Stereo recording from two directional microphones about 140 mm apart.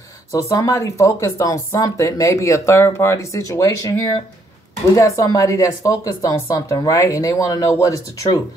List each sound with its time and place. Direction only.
0.3 s speech: 20° left (ahead or behind)
4.9 s speech: 20° left (ahead or behind)